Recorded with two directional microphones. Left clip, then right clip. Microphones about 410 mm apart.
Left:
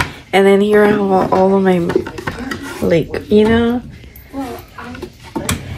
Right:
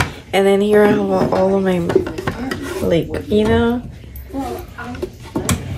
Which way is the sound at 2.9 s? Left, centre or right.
Centre.